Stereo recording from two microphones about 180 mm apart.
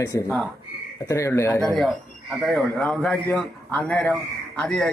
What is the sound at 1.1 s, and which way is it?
A man's voice, 15° left (ahead or behind).